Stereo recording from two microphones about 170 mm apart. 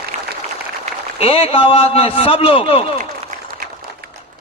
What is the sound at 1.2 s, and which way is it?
Speech, 35° left (ahead or behind).